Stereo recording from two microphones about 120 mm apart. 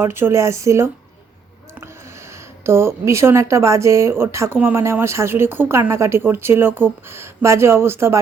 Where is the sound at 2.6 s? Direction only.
20° right (ahead or behind).